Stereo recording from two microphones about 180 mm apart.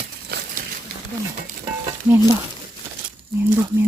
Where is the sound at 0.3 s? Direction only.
60° right (ahead or behind).